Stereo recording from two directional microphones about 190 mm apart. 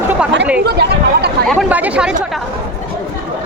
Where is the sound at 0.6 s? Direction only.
60° right (ahead or behind).